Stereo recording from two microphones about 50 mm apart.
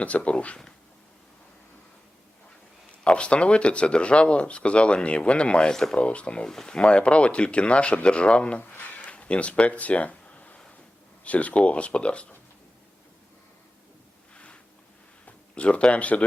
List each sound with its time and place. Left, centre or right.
0.0 s speech: left
3.0 s speech: left
5.7 s speech: centre
6.0 s speech: left
8.6 s a sound: left
9.0 s a sound: left
11.2 s speech: left
14.3 s a sound: left
15.5 s speech: left